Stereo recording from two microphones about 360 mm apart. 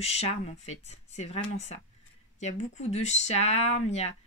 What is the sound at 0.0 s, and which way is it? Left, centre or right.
Speech, centre.